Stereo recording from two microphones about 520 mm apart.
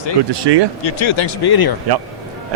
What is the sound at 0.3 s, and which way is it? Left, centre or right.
Speech, right.